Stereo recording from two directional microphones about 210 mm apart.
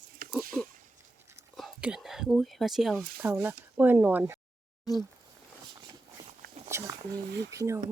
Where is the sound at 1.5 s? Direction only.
Centre (ahead or behind).